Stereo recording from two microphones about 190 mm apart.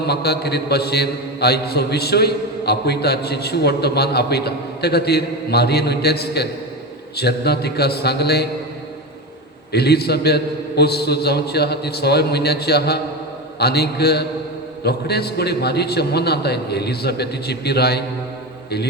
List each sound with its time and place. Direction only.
0.0 s mantra: 60° left (ahead or behind)
9.7 s mantra: 60° left (ahead or behind)